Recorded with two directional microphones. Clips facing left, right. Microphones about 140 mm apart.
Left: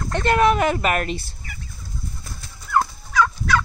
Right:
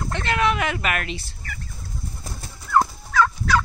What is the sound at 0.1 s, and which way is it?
Speech, 45° left (ahead or behind).